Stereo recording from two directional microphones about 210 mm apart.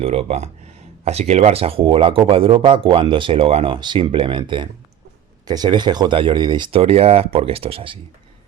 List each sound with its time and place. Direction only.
0.0 s speech: 30° right (ahead or behind)